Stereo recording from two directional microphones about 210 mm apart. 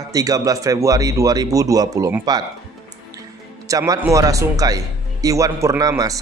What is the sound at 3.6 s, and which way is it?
Speech, 15° right (ahead or behind).